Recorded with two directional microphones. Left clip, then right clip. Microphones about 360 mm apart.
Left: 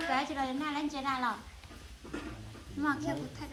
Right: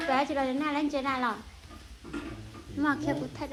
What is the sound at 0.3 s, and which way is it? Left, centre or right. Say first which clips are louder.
Speech: right 5 dB; centre.